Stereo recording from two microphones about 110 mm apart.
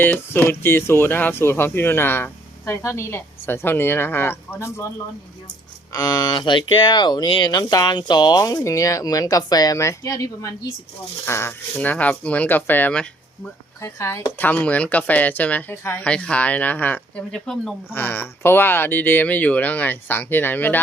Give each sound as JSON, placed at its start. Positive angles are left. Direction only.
{"t": 0.0, "sound": "speech", "side_deg": 15}
{"t": 5.9, "sound": "speech", "side_deg": 35}
{"t": 11.3, "sound": "speech", "side_deg": 25}
{"t": 11.7, "sound": "speech", "side_deg": 15}
{"t": 13.8, "sound": "speech", "side_deg": 25}
{"t": 16.0, "sound": "speech", "side_deg": 10}
{"t": 17.3, "sound": "speech", "side_deg": 5}
{"t": 17.9, "sound": "speech", "side_deg": 20}